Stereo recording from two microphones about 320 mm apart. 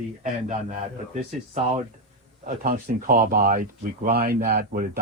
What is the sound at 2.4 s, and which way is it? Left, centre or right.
Speech, right.